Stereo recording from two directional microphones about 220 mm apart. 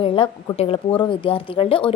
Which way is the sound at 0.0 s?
25° left (ahead or behind).